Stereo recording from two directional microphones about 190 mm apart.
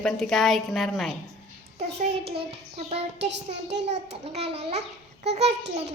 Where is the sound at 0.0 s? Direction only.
Centre (ahead or behind).